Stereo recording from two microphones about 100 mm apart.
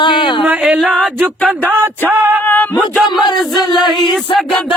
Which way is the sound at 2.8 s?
Centre (ahead or behind).